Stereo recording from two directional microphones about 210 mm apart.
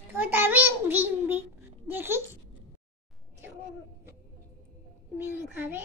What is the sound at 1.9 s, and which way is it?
Babbling, 10° right (ahead or behind).